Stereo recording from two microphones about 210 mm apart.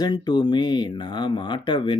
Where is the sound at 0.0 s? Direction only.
20° left (ahead or behind).